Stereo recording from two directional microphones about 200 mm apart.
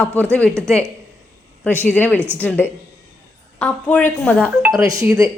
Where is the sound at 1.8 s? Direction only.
10° left (ahead or behind).